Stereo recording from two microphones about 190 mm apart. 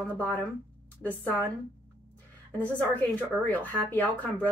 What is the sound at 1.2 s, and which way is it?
Speech, 10° left (ahead or behind).